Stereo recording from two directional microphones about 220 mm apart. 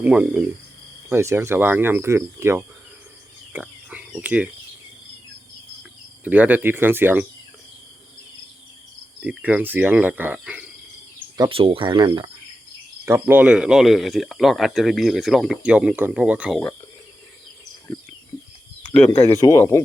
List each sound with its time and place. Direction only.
0.0 s speech: 5° right (ahead or behind)
3.5 s cricket: 5° right (ahead or behind)
6.2 s speech: 5° right (ahead or behind)
9.2 s speech: 10° right (ahead or behind)
11.3 s speech: 25° right (ahead or behind)
13.1 s speech: 10° right (ahead or behind)
18.9 s speech: 5° left (ahead or behind)